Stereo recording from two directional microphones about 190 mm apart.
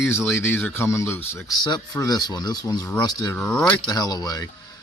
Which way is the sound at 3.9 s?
20° left (ahead or behind).